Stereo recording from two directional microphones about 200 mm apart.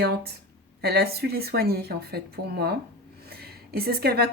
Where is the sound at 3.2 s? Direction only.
50° right (ahead or behind).